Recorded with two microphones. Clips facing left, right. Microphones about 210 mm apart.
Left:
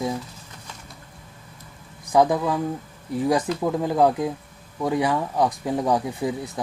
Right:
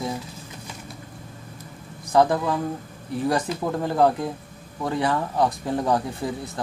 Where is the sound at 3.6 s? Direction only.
10° left (ahead or behind).